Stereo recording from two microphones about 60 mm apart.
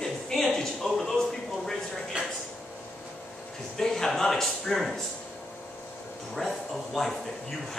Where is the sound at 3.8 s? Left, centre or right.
Centre.